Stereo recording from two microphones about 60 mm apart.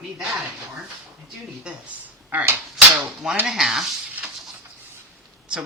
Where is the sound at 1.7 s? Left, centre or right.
Centre.